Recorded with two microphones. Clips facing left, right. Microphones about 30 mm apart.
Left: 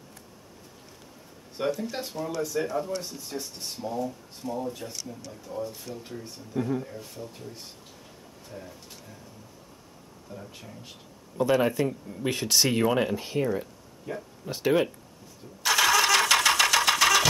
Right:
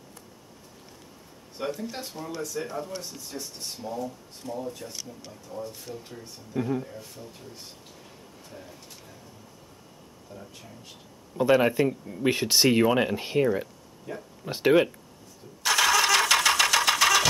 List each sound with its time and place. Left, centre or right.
1.6 s speech: centre
10.3 s speech: centre
11.3 s speech: centre
13.1 s speech: right
14.1 s speech: centre
14.4 s speech: right
14.7 s speech: centre
15.6 s engine: centre